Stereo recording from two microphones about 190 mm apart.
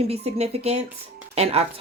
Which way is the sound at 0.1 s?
35° right (ahead or behind).